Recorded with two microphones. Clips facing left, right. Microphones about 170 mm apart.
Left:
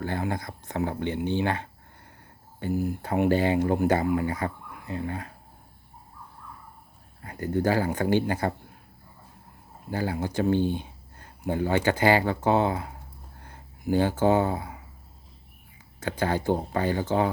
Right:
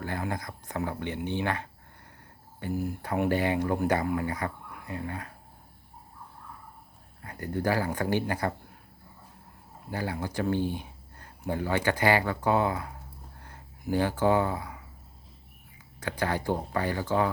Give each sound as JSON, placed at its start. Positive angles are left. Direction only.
{"t": 0.0, "sound": "speech", "side_deg": 25}
{"t": 7.3, "sound": "speech", "side_deg": 25}
{"t": 9.9, "sound": "speech", "side_deg": 25}
{"t": 16.0, "sound": "speech", "side_deg": 25}